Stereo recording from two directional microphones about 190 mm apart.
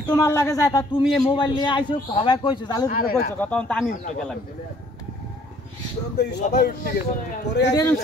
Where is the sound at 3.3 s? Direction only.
5° left (ahead or behind).